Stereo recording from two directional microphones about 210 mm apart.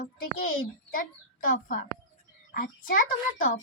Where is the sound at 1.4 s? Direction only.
40° left (ahead or behind).